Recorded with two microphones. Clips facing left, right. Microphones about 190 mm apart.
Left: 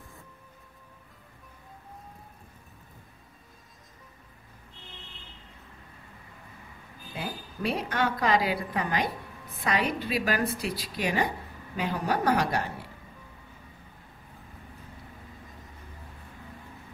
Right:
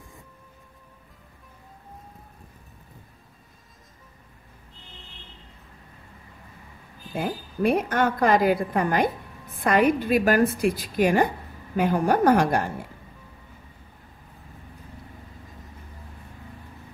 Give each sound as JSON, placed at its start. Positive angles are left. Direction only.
{"t": 7.2, "sound": "a woman's voice", "side_deg": -50}